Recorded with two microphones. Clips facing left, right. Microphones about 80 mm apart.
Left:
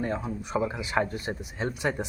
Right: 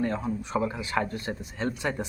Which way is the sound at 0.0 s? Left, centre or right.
Centre.